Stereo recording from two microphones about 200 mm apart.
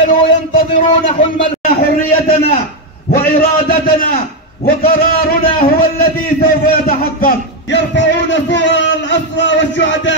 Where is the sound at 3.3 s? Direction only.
45° left (ahead or behind).